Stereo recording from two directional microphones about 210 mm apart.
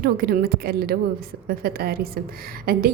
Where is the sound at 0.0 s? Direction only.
45° right (ahead or behind).